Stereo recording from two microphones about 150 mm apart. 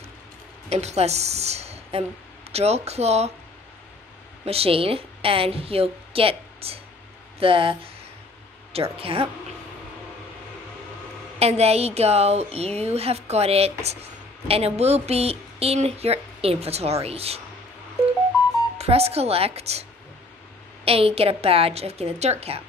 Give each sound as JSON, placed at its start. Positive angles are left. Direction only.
{"t": 0.7, "sound": "speech", "side_deg": -45}
{"t": 4.5, "sound": "a woman's voice", "side_deg": -40}
{"t": 11.3, "sound": "speech", "side_deg": -45}
{"t": 18.8, "sound": "a woman's voice", "side_deg": -45}